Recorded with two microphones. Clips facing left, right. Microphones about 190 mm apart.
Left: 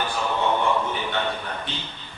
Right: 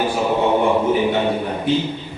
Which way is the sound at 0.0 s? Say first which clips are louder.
Right 7 dB; 15° right (ahead or behind).